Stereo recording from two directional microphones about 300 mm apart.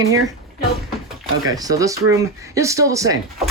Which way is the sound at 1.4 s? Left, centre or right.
Centre.